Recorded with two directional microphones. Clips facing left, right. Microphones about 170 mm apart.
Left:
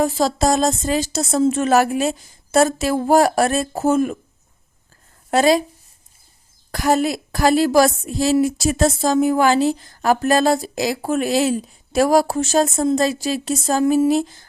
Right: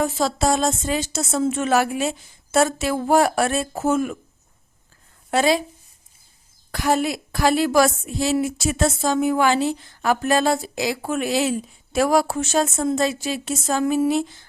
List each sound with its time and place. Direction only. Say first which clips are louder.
0.0 s a woman's voice: left 3 dB; 35° left (ahead or behind)
5.3 s a woman's voice: left 4 dB; 40° left (ahead or behind)
6.7 s a woman's voice: left 3 dB; 40° left (ahead or behind)